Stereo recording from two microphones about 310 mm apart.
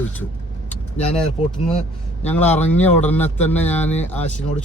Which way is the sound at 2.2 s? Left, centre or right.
Centre.